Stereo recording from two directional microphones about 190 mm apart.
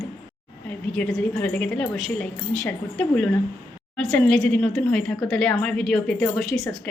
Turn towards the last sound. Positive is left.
turn(degrees=0)  # may be behind; listen again after turning